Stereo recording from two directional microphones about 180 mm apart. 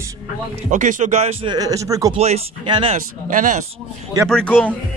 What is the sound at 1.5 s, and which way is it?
Speech, 20° right (ahead or behind).